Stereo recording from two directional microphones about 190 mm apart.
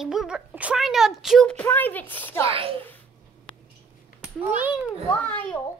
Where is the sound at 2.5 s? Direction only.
30° right (ahead or behind).